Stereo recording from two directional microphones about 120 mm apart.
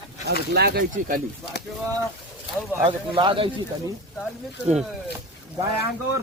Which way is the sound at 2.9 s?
45° right (ahead or behind).